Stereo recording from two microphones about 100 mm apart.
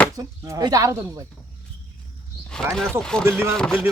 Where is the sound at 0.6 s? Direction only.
35° right (ahead or behind).